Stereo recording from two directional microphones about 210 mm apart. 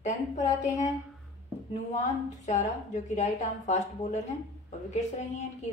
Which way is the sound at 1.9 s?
35° left (ahead or behind).